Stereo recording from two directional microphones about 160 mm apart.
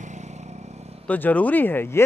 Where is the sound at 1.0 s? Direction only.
10° left (ahead or behind).